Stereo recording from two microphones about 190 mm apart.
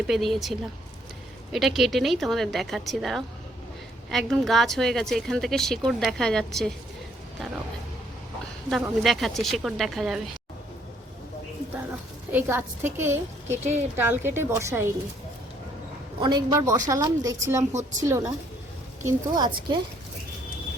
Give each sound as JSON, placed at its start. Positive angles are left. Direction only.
{"t": 0.1, "sound": "a woman's voice", "side_deg": 0}
{"t": 8.7, "sound": "a woman's voice", "side_deg": 0}
{"t": 12.3, "sound": "a woman's voice", "side_deg": -10}
{"t": 16.2, "sound": "a woman's voice", "side_deg": -20}